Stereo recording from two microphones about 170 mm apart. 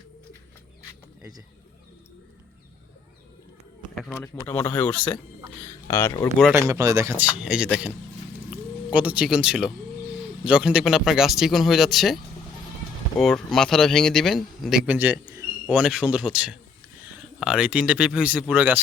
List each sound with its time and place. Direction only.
4.1 s speech: 15° left (ahead or behind)
5.6 s a sound: 15° left (ahead or behind)
6.7 s speech: 20° right (ahead or behind)